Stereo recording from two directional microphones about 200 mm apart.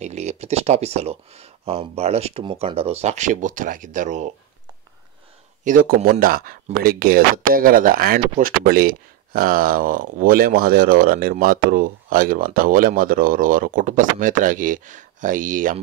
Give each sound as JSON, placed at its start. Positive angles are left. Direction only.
{"t": 0.0, "sound": "speech", "side_deg": -35}
{"t": 5.6, "sound": "speech", "side_deg": -40}